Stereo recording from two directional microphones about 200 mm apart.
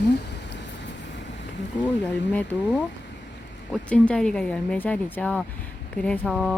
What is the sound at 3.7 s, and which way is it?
Speech, 5° left (ahead or behind).